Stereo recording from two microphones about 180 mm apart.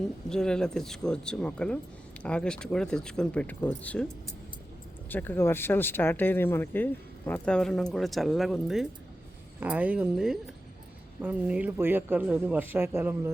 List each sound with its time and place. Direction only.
0.3 s speech: 5° left (ahead or behind)
5.0 s speech: 10° left (ahead or behind); by 13.3 s 15° right (ahead or behind)